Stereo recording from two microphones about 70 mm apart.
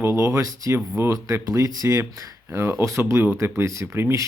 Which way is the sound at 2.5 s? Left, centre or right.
Right.